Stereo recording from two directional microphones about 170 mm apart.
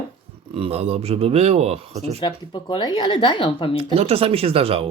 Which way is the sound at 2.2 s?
30° left (ahead or behind).